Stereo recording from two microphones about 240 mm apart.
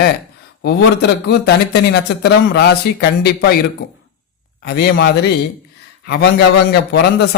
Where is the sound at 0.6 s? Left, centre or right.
Left.